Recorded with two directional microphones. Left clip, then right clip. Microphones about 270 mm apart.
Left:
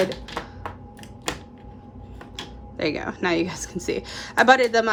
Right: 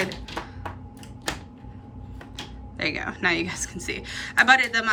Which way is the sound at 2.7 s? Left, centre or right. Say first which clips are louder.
Left 2 dB; centre.